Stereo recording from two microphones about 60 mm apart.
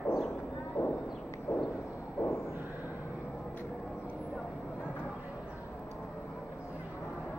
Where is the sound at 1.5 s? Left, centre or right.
Left.